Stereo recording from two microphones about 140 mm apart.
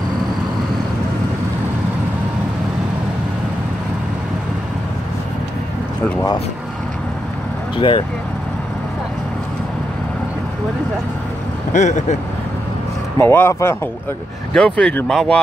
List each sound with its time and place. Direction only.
7.7 s speech: 35° left (ahead or behind)
11.7 s speech: 60° left (ahead or behind)
13.2 s speech: 15° left (ahead or behind)
14.5 s speech: 5° left (ahead or behind)